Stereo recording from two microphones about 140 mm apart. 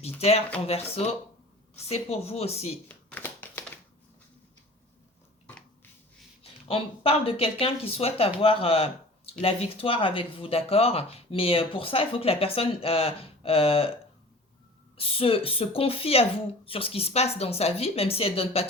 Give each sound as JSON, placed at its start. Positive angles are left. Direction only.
{"t": 0.0, "sound": "speech", "side_deg": 45}
{"t": 2.9, "sound": "a sound", "side_deg": 10}
{"t": 6.4, "sound": "speech", "side_deg": 40}
{"t": 14.9, "sound": "speech", "side_deg": 40}